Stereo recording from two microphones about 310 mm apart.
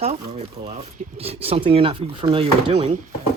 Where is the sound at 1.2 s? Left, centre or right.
Centre.